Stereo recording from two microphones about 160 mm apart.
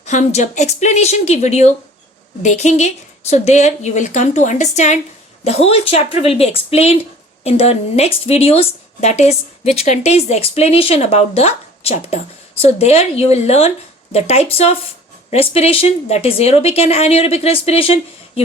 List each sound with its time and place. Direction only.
0.0 s a woman's voice: 45° left (ahead or behind)